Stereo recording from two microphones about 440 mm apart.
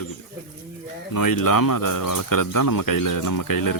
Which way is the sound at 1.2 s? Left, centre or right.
Left.